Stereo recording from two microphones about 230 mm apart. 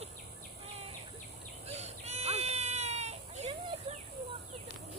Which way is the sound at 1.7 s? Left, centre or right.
Right.